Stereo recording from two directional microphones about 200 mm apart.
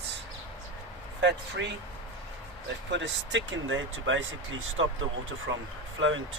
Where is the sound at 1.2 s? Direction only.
60° right (ahead or behind).